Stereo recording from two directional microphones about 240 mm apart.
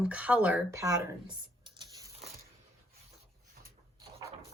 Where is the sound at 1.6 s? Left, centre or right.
Centre.